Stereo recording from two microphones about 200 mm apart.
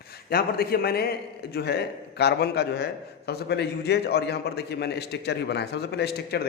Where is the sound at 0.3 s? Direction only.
50° left (ahead or behind).